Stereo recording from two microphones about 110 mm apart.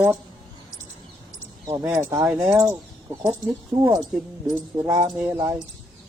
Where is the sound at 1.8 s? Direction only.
20° right (ahead or behind).